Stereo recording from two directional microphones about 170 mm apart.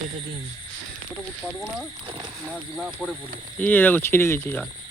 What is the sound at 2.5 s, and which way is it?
Speech, centre (ahead or behind).